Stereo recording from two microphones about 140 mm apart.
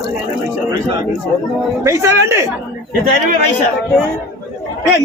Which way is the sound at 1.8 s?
20° right (ahead or behind).